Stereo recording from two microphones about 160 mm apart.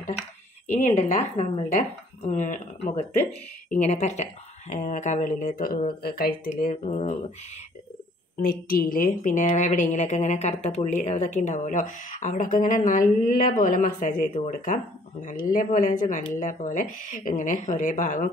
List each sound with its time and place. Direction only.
0.7 s a woman's voice: 45° left (ahead or behind); by 5.9 s 60° left (ahead or behind)
6.0 s speech: 70° left (ahead or behind)
6.7 s speech: 40° left (ahead or behind)
8.4 s a woman's voice: 65° left (ahead or behind)